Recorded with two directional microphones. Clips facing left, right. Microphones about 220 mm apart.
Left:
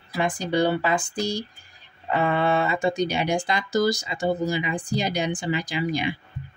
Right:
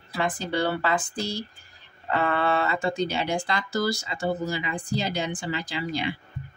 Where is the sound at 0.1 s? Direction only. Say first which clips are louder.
Left 3 dB; 15° left (ahead or behind).